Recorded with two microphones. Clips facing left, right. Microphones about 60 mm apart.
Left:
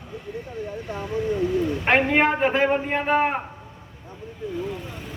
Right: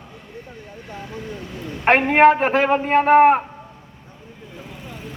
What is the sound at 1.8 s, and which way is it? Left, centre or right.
A man's voice, right.